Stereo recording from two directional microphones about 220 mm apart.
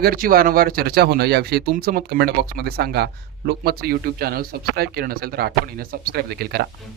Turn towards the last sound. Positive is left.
turn(degrees=-45)  # may be behind; listen again after turning